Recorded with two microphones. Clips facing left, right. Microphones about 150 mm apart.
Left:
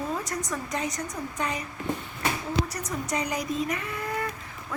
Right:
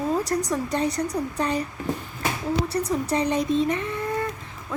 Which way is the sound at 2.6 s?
30° right (ahead or behind).